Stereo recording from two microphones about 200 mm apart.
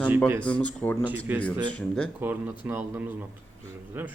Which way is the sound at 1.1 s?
10° right (ahead or behind).